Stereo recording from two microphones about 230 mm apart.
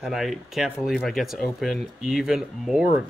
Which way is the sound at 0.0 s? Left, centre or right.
Centre.